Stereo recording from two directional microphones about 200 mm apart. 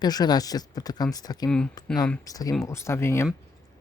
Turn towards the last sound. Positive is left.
turn(degrees=15)  # may be behind; listen again after turning